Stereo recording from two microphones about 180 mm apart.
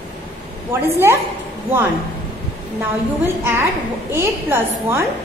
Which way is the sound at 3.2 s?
15° right (ahead or behind).